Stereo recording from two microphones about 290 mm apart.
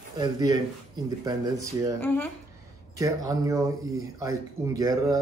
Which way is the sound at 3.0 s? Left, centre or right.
Centre.